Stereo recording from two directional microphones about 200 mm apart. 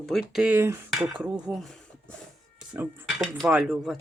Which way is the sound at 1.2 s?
Centre (ahead or behind).